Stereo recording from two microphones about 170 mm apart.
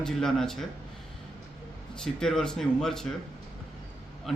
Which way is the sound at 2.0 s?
5° left (ahead or behind).